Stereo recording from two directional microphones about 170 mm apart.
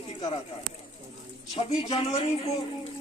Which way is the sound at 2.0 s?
30° left (ahead or behind).